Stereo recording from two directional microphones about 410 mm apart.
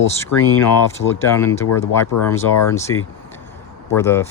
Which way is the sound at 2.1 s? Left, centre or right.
Left.